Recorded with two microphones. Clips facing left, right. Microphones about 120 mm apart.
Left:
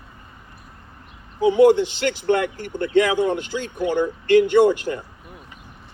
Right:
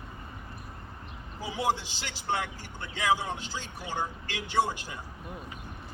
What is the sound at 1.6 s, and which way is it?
Speech, 60° left (ahead or behind).